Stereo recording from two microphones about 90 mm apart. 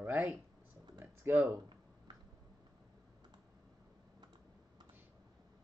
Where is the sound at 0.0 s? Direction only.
20° right (ahead or behind).